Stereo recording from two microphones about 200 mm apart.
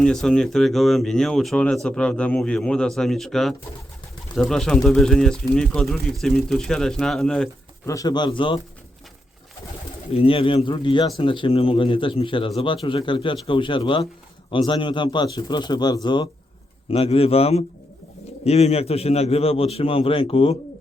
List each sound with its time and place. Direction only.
0.0 s speech: 5° left (ahead or behind)
7.9 s a man's voice: 20° left (ahead or behind)
10.1 s a man's voice: 30° left (ahead or behind)